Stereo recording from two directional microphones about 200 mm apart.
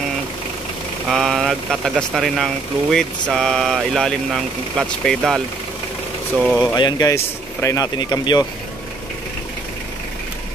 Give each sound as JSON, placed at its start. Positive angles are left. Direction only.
{"t": 1.0, "sound": "speech", "side_deg": 0}
{"t": 6.7, "sound": "speech", "side_deg": 20}